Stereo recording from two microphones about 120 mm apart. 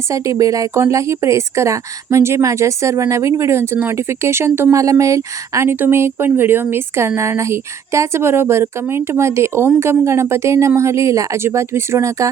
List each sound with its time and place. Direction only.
0.1 s speech: 30° right (ahead or behind)